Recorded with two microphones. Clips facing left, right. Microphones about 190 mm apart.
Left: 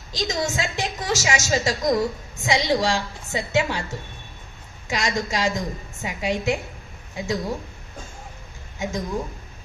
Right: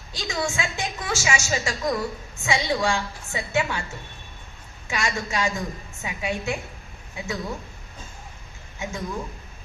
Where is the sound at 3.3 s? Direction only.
35° left (ahead or behind).